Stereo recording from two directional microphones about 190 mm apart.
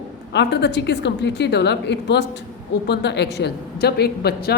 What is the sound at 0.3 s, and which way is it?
Speech, 65° left (ahead or behind).